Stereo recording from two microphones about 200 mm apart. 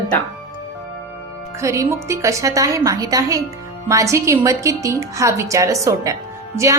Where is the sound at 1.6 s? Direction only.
15° right (ahead or behind).